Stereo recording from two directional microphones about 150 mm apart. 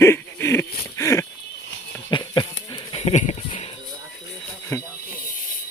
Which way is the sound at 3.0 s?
50° left (ahead or behind).